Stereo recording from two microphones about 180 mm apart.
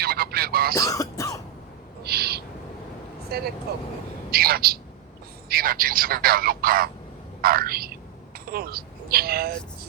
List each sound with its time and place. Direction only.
0.0 s a sound: 60° right (ahead or behind)
0.8 s throat clearing: 20° left (ahead or behind)
2.0 s owl: 65° right (ahead or behind)
3.2 s a man's voice: 60° right (ahead or behind)